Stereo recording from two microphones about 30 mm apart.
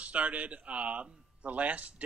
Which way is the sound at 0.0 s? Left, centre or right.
Right.